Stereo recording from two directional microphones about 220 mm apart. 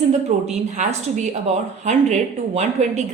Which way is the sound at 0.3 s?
30° right (ahead or behind).